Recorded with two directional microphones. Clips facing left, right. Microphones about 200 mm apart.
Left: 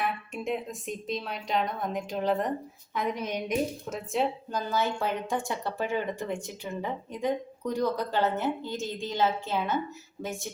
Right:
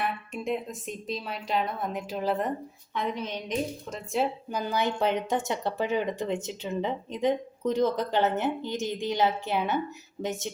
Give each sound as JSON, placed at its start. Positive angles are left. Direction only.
{"t": 0.0, "sound": "speech", "side_deg": 0}
{"t": 2.9, "sound": "a woman's voice", "side_deg": 10}
{"t": 4.5, "sound": "speech", "side_deg": -15}